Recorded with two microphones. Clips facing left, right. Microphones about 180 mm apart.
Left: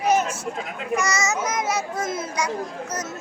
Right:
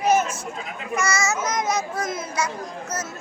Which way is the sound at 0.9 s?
15° left (ahead or behind).